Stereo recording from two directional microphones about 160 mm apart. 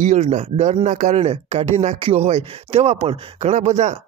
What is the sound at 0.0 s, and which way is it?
Speech, 50° right (ahead or behind).